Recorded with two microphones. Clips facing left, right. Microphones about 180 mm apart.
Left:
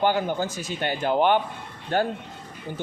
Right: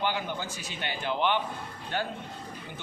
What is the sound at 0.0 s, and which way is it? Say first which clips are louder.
Speech: left 8 dB; 45° left (ahead or behind).